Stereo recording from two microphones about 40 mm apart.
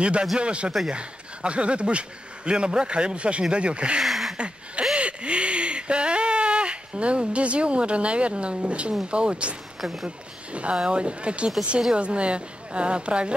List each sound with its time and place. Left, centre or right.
0.0 s speech: right
4.0 s a sound: centre
4.9 s a sound: right
9.1 s speech: right
9.8 s speech: centre
10.0 s speech: right